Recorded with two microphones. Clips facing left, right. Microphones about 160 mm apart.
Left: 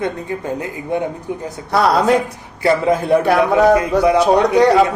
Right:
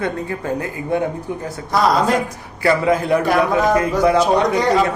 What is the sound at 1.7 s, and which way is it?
Speech, 65° left (ahead or behind).